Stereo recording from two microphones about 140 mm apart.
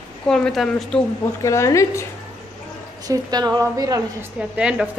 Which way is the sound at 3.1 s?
30° right (ahead or behind).